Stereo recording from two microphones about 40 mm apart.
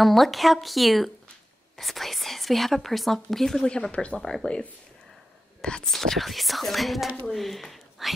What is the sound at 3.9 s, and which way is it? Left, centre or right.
Speech, left.